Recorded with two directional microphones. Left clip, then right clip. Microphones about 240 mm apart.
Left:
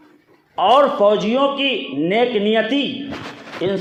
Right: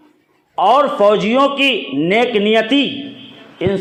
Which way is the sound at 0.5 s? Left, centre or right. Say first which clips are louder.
Right 1 dB; right.